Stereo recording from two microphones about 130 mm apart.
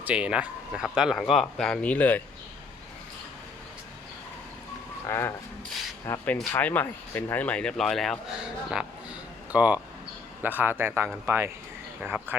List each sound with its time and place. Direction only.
0.0 s speech: 10° right (ahead or behind); by 2.2 s 10° left (ahead or behind)
5.0 s a man's voice: 20° left (ahead or behind); by 12.4 s 15° right (ahead or behind)